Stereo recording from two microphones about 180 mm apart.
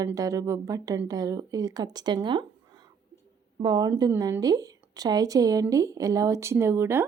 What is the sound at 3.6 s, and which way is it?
A woman's voice, 20° right (ahead or behind).